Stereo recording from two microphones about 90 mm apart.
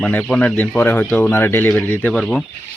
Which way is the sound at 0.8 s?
25° left (ahead or behind).